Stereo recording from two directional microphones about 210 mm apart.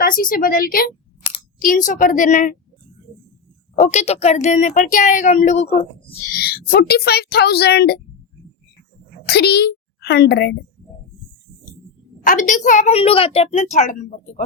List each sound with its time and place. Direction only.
0.0 s a woman's voice: 45° left (ahead or behind)
3.8 s a woman's voice: 30° left (ahead or behind)
6.3 s a woman's voice: 45° left (ahead or behind)
9.2 s a child's voice: 50° left (ahead or behind)
12.2 s a woman's voice: 40° left (ahead or behind)